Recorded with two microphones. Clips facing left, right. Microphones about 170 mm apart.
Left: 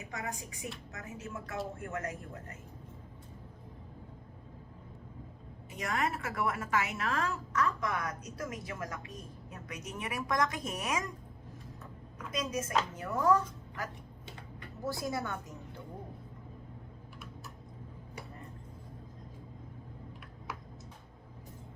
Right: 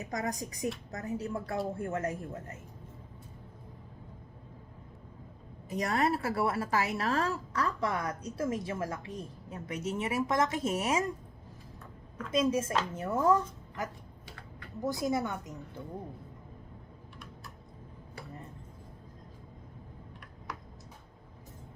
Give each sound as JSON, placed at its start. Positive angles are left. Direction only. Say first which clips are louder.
{"t": 0.0, "sound": "a woman's voice", "louder": "right 6 dB", "side_deg": -40}
{"t": 5.6, "sound": "a woman's voice", "louder": "right 5 dB", "side_deg": -35}
{"t": 12.3, "sound": "speech", "louder": "right 5 dB", "side_deg": -30}